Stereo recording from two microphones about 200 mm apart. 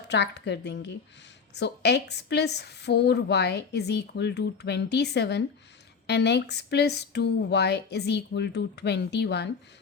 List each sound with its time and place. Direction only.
0.1 s a woman's voice: 60° left (ahead or behind)